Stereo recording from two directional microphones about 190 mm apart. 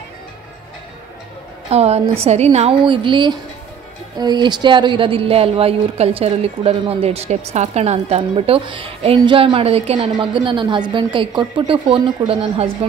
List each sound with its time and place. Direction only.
1.7 s a woman's voice: 35° right (ahead or behind)